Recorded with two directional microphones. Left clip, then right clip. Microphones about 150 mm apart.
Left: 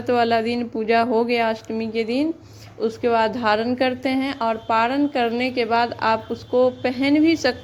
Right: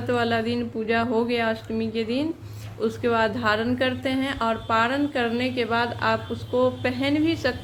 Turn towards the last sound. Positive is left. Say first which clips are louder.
# left 5 dB
turn(degrees=40)  # may be behind; listen again after turning